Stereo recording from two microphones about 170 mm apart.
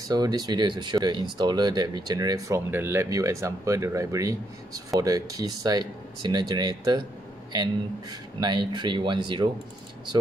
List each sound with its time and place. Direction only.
0.1 s speech: 25° right (ahead or behind)